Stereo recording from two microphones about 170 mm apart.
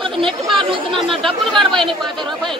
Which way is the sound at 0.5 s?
30° right (ahead or behind).